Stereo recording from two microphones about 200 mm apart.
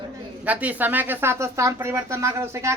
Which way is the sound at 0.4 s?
5° right (ahead or behind).